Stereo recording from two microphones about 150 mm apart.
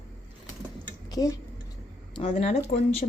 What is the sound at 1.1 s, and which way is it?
Speech, 25° left (ahead or behind).